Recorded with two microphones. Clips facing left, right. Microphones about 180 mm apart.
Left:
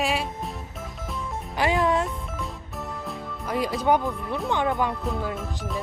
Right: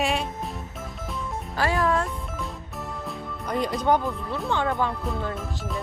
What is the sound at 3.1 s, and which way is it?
Speech, 5° left (ahead or behind).